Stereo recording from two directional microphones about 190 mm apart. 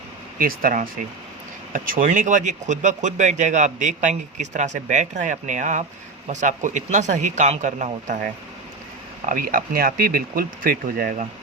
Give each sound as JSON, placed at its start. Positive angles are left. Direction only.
{"t": 0.3, "sound": "speech", "side_deg": -50}
{"t": 9.3, "sound": "speech", "side_deg": -45}